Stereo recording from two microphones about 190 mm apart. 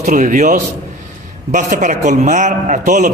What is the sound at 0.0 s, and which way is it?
A man's voice, 40° right (ahead or behind).